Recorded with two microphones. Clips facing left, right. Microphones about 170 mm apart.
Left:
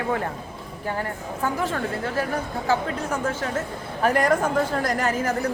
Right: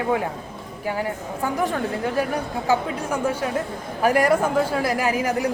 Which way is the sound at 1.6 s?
15° right (ahead or behind).